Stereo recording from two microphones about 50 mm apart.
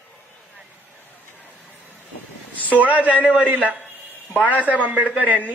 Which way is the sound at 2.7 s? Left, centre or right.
Right.